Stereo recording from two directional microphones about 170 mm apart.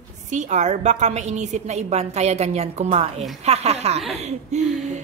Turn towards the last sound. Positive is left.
turn(degrees=-40)  # may be behind; listen again after turning